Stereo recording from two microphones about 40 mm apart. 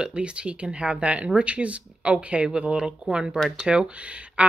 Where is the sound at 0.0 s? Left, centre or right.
Right.